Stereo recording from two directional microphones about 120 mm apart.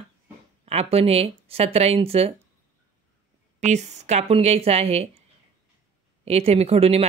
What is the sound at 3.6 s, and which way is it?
Speech, 70° right (ahead or behind).